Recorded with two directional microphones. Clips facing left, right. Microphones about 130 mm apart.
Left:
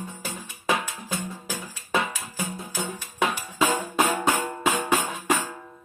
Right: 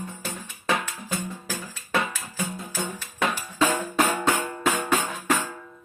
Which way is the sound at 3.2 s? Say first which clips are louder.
Even; 15° left (ahead or behind).